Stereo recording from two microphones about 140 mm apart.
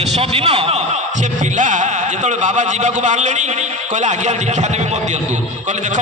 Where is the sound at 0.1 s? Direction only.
45° right (ahead or behind).